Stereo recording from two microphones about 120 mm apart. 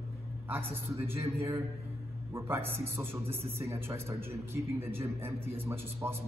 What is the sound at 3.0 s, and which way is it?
A man's voice, 20° right (ahead or behind).